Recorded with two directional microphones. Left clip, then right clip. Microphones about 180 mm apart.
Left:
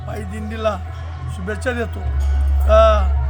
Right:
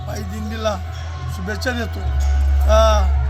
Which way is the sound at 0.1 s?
10° left (ahead or behind).